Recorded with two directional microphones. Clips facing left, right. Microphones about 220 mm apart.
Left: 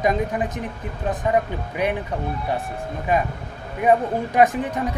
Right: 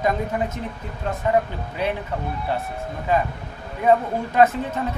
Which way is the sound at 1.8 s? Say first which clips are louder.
Left 2 dB; 15° left (ahead or behind).